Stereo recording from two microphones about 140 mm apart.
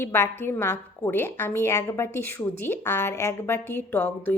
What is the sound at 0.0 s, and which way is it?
A woman's voice, 15° left (ahead or behind).